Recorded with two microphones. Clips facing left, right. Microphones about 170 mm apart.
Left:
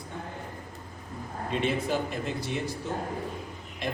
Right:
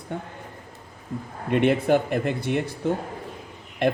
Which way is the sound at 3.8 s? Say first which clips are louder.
Right 11 dB; 60° right (ahead or behind).